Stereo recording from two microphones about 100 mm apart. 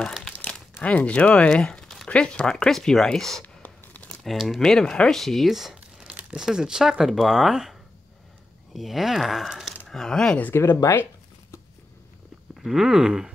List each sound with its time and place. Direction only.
0.0 s speech: 5° left (ahead or behind)
3.4 s a sound: 15° left (ahead or behind)
4.2 s speech: centre (ahead or behind)
8.7 s speech: centre (ahead or behind)
10.5 s speech: 25° left (ahead or behind)
12.5 s speech: 5° right (ahead or behind)